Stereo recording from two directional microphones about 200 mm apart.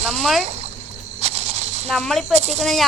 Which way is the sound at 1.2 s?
30° right (ahead or behind).